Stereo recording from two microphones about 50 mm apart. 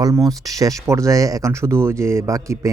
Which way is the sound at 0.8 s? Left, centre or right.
Right.